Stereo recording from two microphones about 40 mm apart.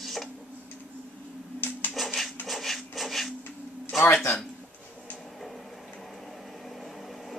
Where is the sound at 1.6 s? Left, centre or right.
Left.